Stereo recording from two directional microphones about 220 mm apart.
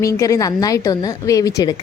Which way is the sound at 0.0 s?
15° left (ahead or behind).